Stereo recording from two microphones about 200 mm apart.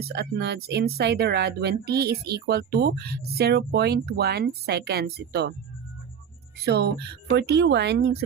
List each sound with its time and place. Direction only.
0.0 s speech: 55° right (ahead or behind)
6.6 s speech: 55° right (ahead or behind)